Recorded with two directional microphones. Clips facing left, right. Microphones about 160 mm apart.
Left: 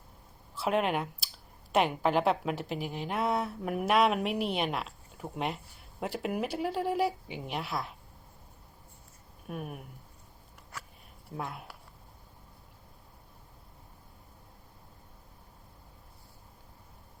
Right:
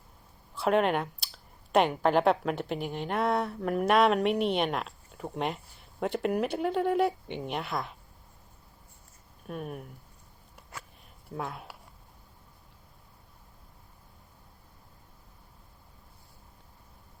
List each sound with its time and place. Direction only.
0.5 s a woman's voice: centre (ahead or behind)
9.5 s speech: 5° left (ahead or behind)
11.3 s a woman's voice: centre (ahead or behind)